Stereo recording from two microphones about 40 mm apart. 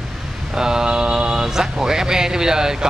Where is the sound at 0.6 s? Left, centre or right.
Centre.